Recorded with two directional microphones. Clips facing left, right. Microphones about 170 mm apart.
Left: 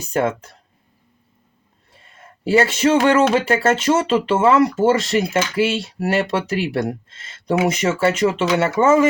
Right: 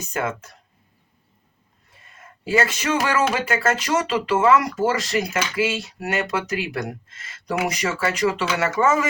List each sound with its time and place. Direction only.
0.0 s speech: 30° left (ahead or behind)
2.0 s speech: 30° left (ahead or behind)